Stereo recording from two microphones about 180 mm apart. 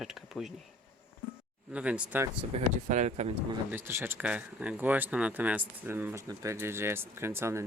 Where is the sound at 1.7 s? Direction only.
5° right (ahead or behind).